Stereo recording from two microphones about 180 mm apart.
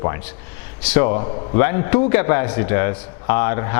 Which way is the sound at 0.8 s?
10° left (ahead or behind).